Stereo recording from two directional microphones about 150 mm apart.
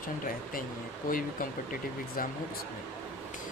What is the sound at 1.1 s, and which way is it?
Speech, 65° left (ahead or behind).